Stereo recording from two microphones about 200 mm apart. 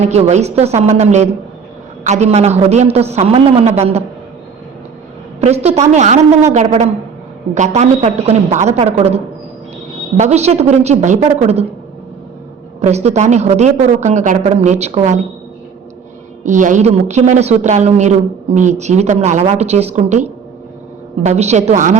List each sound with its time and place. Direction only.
0.0 s a woman's voice: 35° right (ahead or behind)
5.4 s a woman's voice: 30° right (ahead or behind)
12.8 s a woman's voice: 35° right (ahead or behind)
16.4 s a woman's voice: 40° right (ahead or behind)
21.2 s a woman's voice: 35° right (ahead or behind)